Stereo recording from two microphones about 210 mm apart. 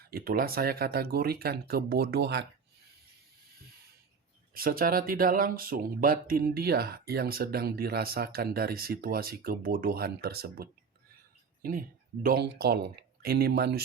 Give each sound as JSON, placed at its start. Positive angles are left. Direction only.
{"t": 0.1, "sound": "speech", "side_deg": -45}
{"t": 4.5, "sound": "speech", "side_deg": -45}